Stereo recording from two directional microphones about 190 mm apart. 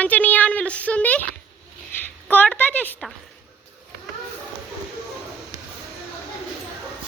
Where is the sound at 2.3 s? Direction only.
10° left (ahead or behind).